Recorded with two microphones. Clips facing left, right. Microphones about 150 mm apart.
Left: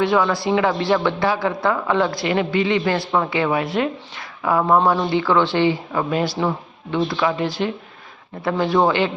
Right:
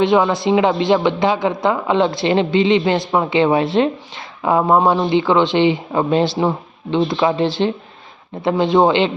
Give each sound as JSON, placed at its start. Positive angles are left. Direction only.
{"t": 0.0, "sound": "speech", "side_deg": -20}